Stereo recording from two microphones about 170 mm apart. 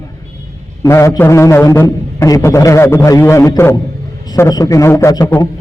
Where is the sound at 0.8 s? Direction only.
20° left (ahead or behind).